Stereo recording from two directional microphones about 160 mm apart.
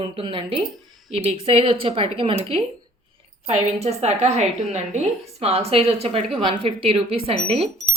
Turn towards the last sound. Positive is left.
turn(degrees=-40)  # may be behind; listen again after turning